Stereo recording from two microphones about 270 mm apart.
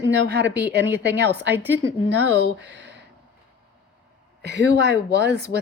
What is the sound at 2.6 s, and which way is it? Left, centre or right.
Speech, right.